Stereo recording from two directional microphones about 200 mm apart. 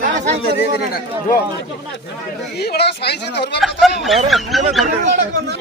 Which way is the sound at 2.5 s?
55° left (ahead or behind).